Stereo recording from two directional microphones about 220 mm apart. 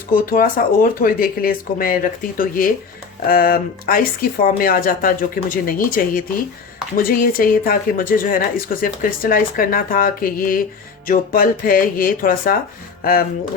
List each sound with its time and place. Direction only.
0.3 s speech: 40° left (ahead or behind)